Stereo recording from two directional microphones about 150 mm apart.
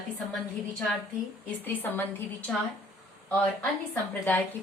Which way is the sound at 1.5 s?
10° left (ahead or behind).